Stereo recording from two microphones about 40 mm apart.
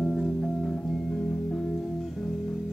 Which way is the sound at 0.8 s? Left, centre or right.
Left.